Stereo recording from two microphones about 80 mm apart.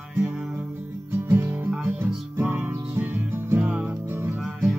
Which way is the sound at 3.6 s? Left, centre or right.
Centre.